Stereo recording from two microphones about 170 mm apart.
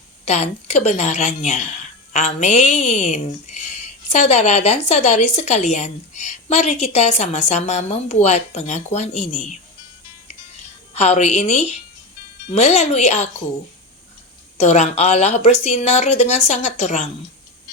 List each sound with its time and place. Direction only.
0.3 s a woman's voice: 40° left (ahead or behind)
10.9 s a woman's voice: 40° left (ahead or behind)
14.6 s a woman's voice: 40° left (ahead or behind)